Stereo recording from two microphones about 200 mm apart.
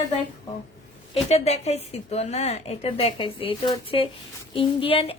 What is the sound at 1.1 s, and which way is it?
A woman's voice, 30° left (ahead or behind).